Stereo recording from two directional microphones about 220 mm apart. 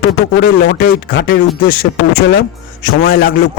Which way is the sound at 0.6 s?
40° left (ahead or behind).